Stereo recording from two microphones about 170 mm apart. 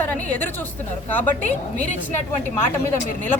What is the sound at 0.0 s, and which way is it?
A woman's voice, 10° left (ahead or behind).